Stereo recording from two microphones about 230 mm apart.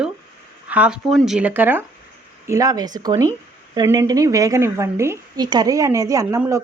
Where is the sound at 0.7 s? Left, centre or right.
Centre.